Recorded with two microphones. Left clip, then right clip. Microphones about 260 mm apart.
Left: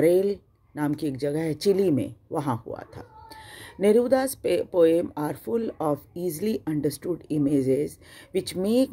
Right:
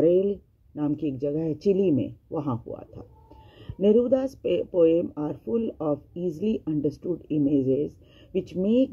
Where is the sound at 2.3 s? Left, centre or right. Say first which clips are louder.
Left 3 dB; left.